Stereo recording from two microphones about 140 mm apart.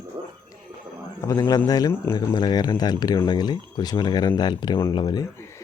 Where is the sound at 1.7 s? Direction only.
25° left (ahead or behind).